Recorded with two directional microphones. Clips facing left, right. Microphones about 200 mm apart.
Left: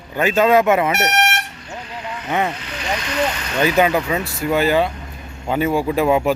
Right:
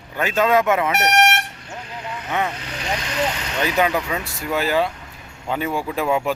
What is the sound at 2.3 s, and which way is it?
Speech, 15° left (ahead or behind).